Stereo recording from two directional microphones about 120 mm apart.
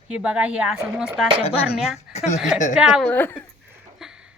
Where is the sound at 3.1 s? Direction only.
15° left (ahead or behind).